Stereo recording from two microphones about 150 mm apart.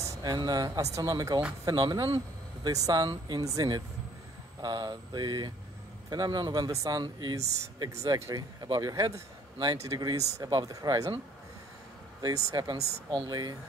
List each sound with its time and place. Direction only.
0.2 s speech: 25° right (ahead or behind)
12.4 s speech: 25° right (ahead or behind)